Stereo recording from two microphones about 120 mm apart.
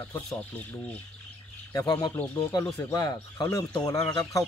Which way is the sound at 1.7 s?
30° left (ahead or behind).